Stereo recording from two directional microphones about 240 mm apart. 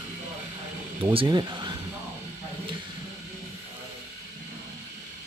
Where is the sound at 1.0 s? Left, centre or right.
Centre.